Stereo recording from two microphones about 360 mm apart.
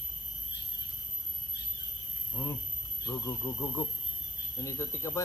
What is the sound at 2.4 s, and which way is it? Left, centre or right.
Speech, centre.